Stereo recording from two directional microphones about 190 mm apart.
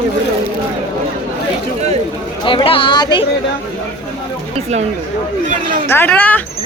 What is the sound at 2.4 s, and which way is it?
Speech, 25° left (ahead or behind).